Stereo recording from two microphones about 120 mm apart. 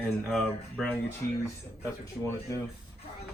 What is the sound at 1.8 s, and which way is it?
Speech, 25° left (ahead or behind).